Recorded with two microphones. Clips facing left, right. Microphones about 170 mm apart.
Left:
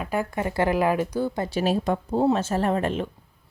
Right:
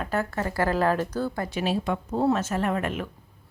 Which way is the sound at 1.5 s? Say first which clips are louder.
Left 3 dB; 40° left (ahead or behind).